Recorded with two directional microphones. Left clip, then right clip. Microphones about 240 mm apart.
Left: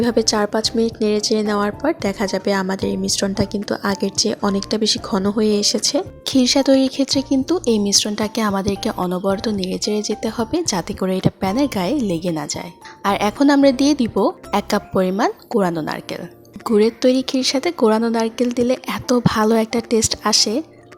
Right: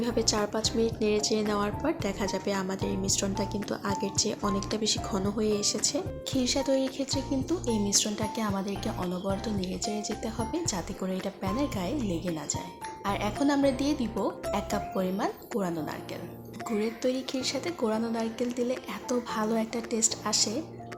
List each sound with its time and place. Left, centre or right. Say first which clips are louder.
0.0 s speech: left 11 dB; left